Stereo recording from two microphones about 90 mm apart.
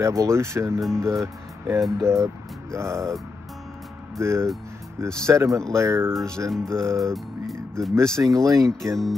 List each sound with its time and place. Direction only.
0.0 s speech: 35° right (ahead or behind)
4.2 s speech: 30° right (ahead or behind)
7.0 s music: 5° left (ahead or behind)
8.2 s speech: 35° right (ahead or behind)
8.6 s speech: 5° left (ahead or behind)